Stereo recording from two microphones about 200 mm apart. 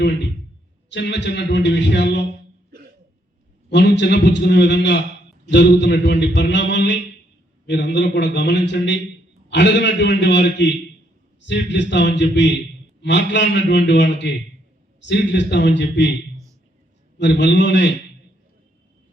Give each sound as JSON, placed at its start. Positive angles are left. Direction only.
{"t": 0.0, "sound": "a man's voice", "side_deg": 60}
{"t": 3.7, "sound": "a man's voice", "side_deg": 60}
{"t": 17.2, "sound": "a man's voice", "side_deg": 60}